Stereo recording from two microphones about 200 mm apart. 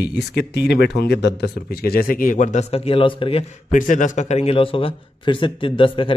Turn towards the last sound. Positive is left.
turn(degrees=25)  # may be behind; listen again after turning